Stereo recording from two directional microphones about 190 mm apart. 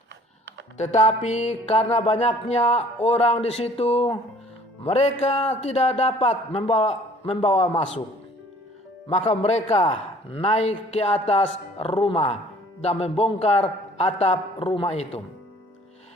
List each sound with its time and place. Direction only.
0.8 s music: 40° left (ahead or behind)
9.0 s music: 35° left (ahead or behind)